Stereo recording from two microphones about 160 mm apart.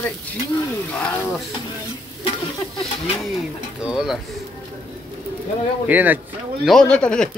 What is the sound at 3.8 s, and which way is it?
Speech, 5° right (ahead or behind).